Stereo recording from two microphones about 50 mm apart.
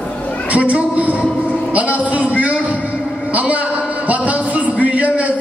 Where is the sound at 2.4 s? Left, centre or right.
Right.